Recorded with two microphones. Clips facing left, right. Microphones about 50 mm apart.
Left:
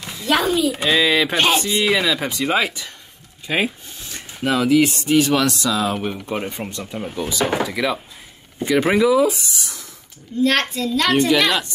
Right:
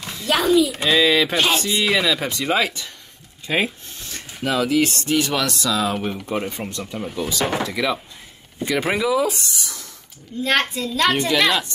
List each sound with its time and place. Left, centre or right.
0.0 s a sound: centre
0.6 s speech: centre
1.3 s speech: left
1.6 s speech: centre
1.9 s speech: centre
6.2 s speech: centre
6.8 s speech: centre
10.4 s speech: centre